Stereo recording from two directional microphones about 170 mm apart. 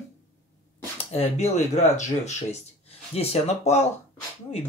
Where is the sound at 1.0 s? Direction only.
40° left (ahead or behind).